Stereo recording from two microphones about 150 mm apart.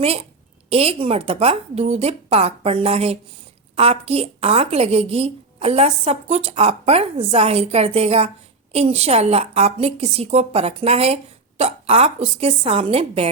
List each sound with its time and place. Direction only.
0.0 s a woman's voice: 40° right (ahead or behind)